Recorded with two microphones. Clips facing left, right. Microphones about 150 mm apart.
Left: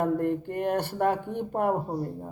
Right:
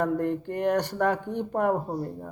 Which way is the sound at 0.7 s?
25° left (ahead or behind).